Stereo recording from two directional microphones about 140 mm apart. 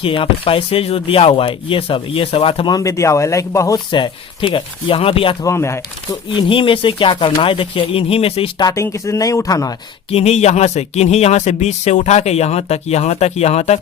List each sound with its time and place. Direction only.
0.0 s speech: 40° left (ahead or behind); by 3.8 s 20° left (ahead or behind)
3.9 s speech: 35° left (ahead or behind)
5.5 s speech: 20° left (ahead or behind)
6.3 s speech: 40° left (ahead or behind)
8.6 s speech: 20° left (ahead or behind)
10.1 s speech: 50° left (ahead or behind)